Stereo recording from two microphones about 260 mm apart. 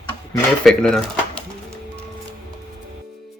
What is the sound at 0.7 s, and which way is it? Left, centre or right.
Speech, centre.